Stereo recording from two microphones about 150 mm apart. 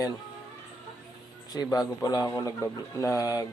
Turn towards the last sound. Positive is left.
turn(degrees=20)  # may be behind; listen again after turning